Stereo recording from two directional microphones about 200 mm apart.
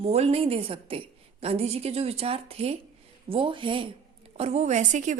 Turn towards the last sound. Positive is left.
turn(degrees=-35)  # may be behind; listen again after turning